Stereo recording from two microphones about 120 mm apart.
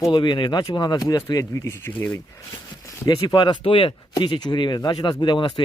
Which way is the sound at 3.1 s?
40° left (ahead or behind).